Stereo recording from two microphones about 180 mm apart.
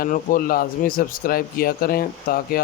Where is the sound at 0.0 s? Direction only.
50° left (ahead or behind).